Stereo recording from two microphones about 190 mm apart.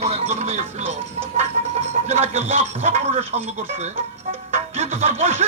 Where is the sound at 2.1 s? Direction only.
35° right (ahead or behind).